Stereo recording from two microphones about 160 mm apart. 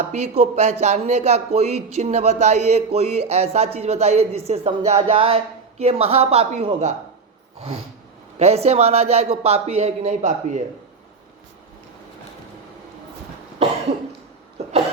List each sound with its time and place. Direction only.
0.1 s speech: 45° right (ahead or behind)
8.4 s speech: 40° right (ahead or behind)
14.6 s cough: 40° right (ahead or behind)